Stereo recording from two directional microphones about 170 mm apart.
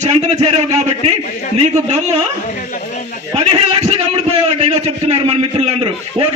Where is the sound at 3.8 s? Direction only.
40° right (ahead or behind).